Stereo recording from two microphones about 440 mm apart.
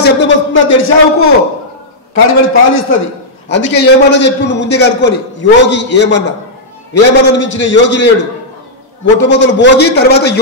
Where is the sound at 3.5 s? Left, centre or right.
Left.